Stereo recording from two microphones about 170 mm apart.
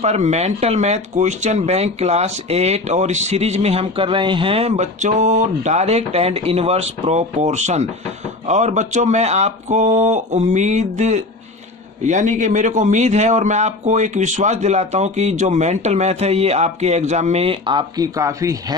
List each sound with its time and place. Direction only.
0.0 s a man's voice: 40° right (ahead or behind); by 18.5 s 20° right (ahead or behind)